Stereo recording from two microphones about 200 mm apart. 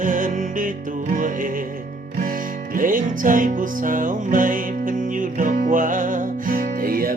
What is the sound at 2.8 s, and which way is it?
Music, 40° right (ahead or behind).